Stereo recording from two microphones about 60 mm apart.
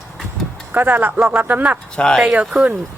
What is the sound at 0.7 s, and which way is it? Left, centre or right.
Speech, right.